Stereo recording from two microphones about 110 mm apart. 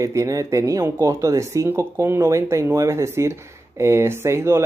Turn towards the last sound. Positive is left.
turn(degrees=-25)  # may be behind; listen again after turning